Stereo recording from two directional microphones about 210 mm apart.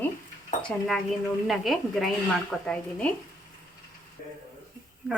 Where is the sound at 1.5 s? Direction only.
Centre (ahead or behind).